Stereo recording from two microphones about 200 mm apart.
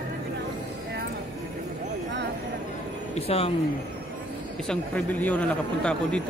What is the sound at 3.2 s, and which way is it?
Speech, 30° left (ahead or behind).